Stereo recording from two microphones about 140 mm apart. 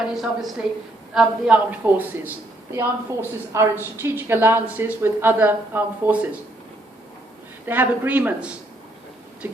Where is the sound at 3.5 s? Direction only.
20° right (ahead or behind).